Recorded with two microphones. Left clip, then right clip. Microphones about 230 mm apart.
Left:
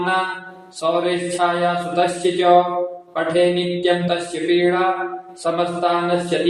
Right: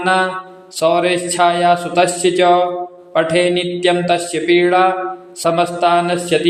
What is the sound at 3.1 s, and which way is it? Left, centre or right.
Mantra, right.